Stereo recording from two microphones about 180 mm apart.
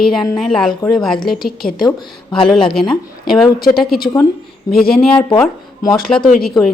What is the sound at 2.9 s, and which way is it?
A woman's voice, centre (ahead or behind).